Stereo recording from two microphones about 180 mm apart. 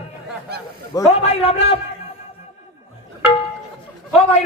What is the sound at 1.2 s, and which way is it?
Speech, 35° left (ahead or behind).